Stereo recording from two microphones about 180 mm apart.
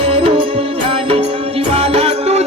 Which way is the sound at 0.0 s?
35° right (ahead or behind).